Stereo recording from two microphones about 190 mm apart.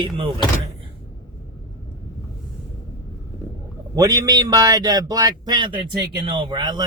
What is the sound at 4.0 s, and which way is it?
Speech, 20° right (ahead or behind).